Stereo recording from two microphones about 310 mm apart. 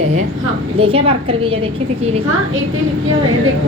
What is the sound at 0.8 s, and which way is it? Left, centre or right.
Speech, centre.